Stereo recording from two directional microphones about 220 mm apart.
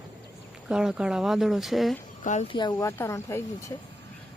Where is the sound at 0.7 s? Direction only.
5° right (ahead or behind).